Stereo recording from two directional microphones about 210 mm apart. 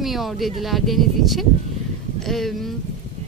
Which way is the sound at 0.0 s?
Centre (ahead or behind).